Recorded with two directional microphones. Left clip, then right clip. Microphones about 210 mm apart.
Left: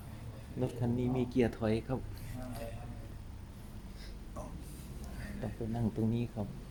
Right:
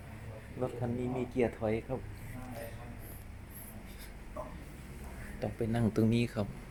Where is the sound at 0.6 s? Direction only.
20° left (ahead or behind).